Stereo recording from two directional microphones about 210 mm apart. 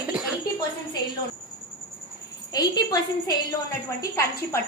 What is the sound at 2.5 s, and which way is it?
A woman's voice, 20° left (ahead or behind).